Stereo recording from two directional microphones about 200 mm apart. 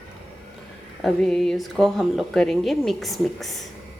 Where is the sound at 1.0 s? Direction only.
Centre (ahead or behind).